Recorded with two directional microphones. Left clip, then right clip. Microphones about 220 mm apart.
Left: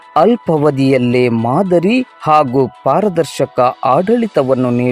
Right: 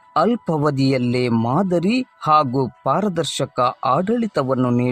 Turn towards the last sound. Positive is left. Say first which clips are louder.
# left 7 dB
turn(degrees=5)  # may be behind; listen again after turning